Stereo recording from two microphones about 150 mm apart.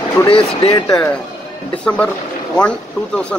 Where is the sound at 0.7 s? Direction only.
30° left (ahead or behind).